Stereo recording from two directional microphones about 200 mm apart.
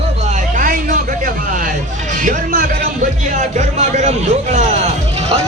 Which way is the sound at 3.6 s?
35° right (ahead or behind).